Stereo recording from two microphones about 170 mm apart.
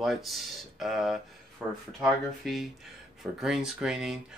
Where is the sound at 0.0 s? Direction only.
Centre (ahead or behind).